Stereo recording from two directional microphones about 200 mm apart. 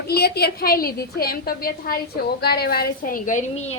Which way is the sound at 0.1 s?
50° left (ahead or behind).